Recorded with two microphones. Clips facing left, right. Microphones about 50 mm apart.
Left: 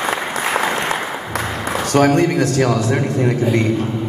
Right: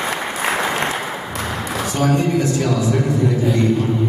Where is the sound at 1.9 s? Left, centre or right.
Left.